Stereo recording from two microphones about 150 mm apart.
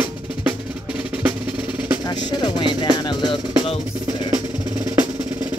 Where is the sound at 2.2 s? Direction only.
30° left (ahead or behind).